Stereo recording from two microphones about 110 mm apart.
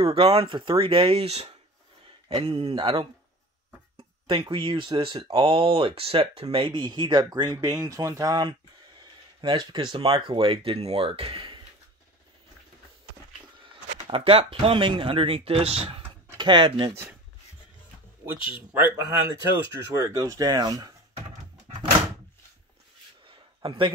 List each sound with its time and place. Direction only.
0.0 s speech: 65° right (ahead or behind); by 8.5 s 35° right (ahead or behind)
9.4 s speech: 45° right (ahead or behind)
14.0 s speech: 55° right (ahead or behind)
16.3 s speech: 45° right (ahead or behind)
18.5 s speech: 15° right (ahead or behind)
20.0 s speech: 30° right (ahead or behind)
23.2 s a sound: 50° right (ahead or behind)